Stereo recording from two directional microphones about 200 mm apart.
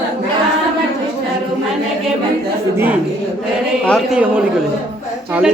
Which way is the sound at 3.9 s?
5° right (ahead or behind).